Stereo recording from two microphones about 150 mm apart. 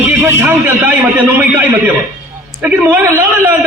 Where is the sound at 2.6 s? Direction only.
10° right (ahead or behind).